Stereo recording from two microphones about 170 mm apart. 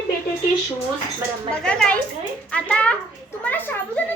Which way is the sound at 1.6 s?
5° left (ahead or behind).